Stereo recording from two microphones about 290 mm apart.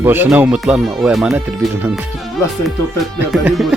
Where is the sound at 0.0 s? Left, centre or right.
Centre.